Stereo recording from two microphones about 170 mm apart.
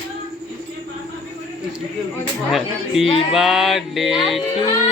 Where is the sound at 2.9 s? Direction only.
Centre (ahead or behind).